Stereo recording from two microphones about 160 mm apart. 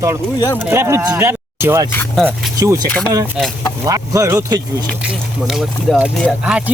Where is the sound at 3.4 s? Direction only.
5° right (ahead or behind).